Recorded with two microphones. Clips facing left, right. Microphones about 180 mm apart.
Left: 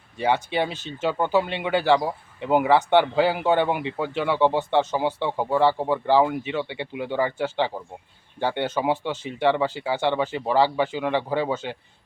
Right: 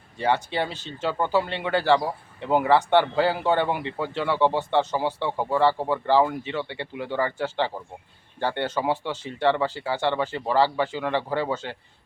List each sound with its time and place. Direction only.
0.2 s speech: 15° left (ahead or behind)